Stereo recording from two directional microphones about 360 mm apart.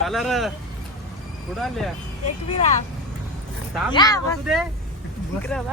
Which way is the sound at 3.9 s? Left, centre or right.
Centre.